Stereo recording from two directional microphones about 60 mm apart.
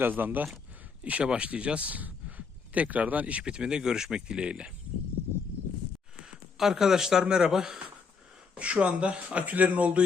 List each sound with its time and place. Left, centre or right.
0.0 s speech: right
1.0 s speech: centre
6.2 s speech: centre
8.5 s speech: right